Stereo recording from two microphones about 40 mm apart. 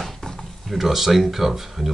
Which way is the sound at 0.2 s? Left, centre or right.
Centre.